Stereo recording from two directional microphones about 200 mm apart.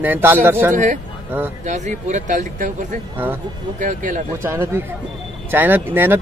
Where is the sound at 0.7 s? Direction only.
40° right (ahead or behind).